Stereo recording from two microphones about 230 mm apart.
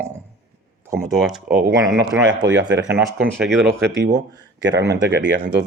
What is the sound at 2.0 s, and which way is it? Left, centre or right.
Speech, right.